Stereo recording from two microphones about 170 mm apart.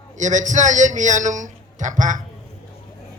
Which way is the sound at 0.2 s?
45° right (ahead or behind).